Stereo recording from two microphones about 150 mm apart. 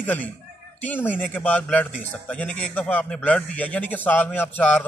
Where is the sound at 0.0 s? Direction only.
10° left (ahead or behind).